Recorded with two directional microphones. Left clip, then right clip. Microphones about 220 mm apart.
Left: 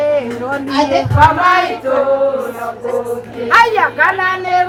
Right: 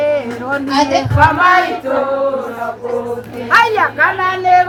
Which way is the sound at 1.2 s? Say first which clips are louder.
Even; 10° left (ahead or behind).